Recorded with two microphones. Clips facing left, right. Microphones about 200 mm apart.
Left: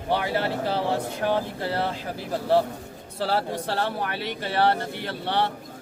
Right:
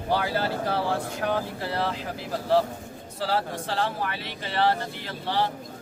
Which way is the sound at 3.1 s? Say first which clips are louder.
Left 2 dB; 30° left (ahead or behind).